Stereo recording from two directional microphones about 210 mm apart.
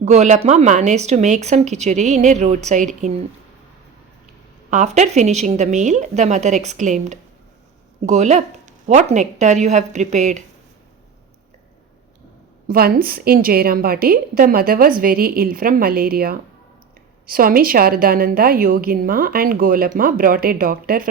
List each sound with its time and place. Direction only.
0.0 s speech: 35° right (ahead or behind)
4.7 s speech: 35° right (ahead or behind)
12.6 s a woman's voice: 45° right (ahead or behind)